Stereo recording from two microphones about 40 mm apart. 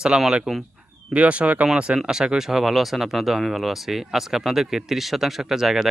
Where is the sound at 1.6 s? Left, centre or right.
Right.